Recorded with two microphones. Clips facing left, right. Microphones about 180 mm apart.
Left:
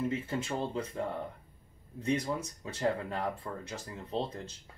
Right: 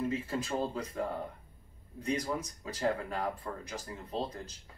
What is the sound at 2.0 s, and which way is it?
Speech, 25° left (ahead or behind).